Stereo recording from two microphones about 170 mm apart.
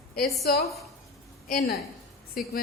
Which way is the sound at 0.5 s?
65° left (ahead or behind).